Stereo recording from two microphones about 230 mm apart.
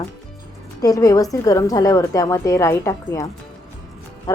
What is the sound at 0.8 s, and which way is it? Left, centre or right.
Speech, centre.